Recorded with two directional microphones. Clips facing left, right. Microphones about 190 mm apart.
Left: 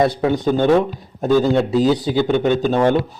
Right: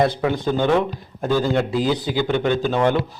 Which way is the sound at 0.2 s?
25° left (ahead or behind).